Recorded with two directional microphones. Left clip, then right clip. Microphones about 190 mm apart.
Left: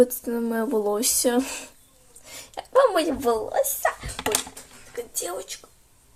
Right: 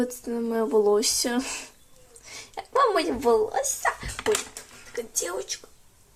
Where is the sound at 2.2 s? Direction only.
10° left (ahead or behind).